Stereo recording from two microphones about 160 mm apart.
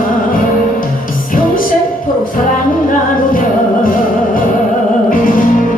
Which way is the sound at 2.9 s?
60° left (ahead or behind).